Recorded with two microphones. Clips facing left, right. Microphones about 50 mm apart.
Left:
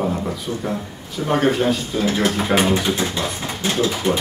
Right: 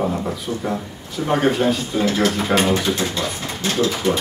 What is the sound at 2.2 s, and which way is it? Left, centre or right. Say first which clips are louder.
Speech: left 2 dB; centre.